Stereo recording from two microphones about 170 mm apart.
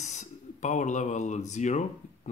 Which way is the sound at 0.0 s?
45° left (ahead or behind).